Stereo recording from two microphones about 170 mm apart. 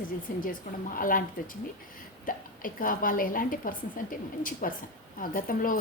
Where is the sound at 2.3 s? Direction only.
55° left (ahead or behind).